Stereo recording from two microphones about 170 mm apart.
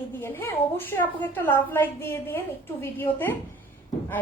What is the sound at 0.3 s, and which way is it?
A woman's voice, 15° left (ahead or behind).